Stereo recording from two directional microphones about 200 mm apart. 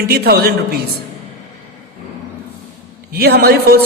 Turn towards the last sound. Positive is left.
turn(degrees=-50)  # may be behind; listen again after turning